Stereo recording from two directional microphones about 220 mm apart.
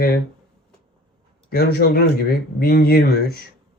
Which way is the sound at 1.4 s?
45° left (ahead or behind).